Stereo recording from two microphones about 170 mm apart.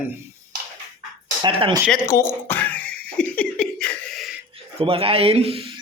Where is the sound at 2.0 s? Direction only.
15° left (ahead or behind).